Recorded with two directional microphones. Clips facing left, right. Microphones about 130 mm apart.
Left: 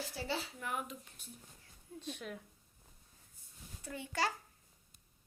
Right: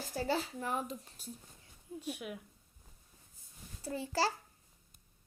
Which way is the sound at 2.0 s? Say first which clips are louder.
Right 3 dB; 10° right (ahead or behind).